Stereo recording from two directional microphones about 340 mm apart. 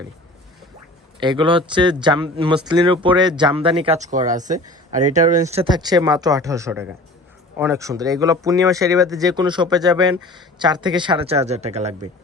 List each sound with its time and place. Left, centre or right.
1.2 s speech: centre